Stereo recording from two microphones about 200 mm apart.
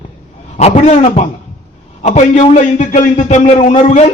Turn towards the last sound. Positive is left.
turn(degrees=35)  # may be behind; listen again after turning